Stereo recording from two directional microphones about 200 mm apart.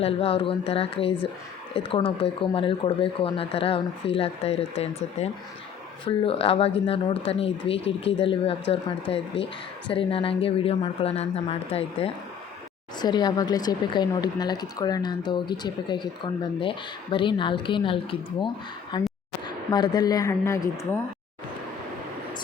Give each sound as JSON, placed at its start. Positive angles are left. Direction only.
{"t": 0.0, "sound": "a woman's voice", "side_deg": 30}